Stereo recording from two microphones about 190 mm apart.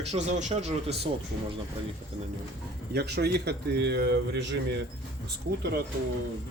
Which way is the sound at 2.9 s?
60° right (ahead or behind).